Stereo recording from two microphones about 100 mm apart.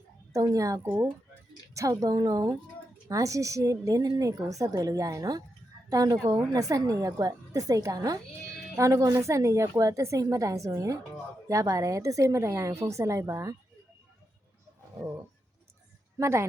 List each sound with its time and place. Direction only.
0.3 s a woman's voice: 35° right (ahead or behind)
16.1 s speech: 30° right (ahead or behind)